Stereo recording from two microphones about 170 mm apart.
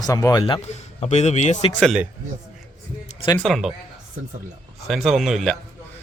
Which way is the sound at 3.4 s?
Centre (ahead or behind).